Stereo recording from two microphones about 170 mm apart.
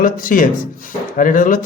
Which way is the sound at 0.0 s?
50° left (ahead or behind).